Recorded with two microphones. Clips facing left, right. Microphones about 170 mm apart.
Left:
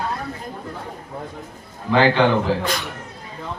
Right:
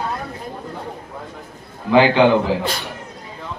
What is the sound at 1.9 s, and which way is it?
Speech, 15° right (ahead or behind).